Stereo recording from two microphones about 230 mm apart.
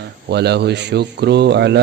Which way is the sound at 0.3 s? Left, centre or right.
Right.